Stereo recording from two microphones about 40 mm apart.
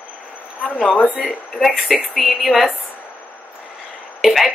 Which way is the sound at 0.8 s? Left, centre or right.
Left.